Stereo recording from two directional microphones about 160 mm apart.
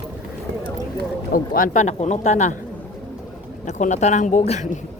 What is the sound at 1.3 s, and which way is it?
Speech, 60° left (ahead or behind).